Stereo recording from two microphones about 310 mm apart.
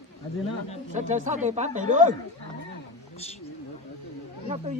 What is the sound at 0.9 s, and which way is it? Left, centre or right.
Speech, right.